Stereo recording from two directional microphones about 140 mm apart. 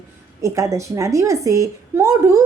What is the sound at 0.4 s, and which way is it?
A woman's voice, 20° right (ahead or behind).